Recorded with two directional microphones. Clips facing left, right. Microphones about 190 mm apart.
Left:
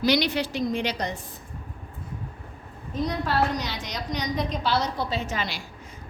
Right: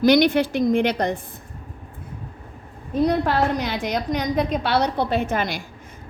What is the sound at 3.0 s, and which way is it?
A woman's voice, 60° right (ahead or behind).